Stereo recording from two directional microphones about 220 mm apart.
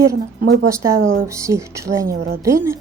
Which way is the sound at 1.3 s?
15° right (ahead or behind).